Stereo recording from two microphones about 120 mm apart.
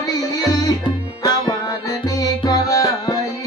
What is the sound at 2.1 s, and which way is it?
Music, 30° left (ahead or behind).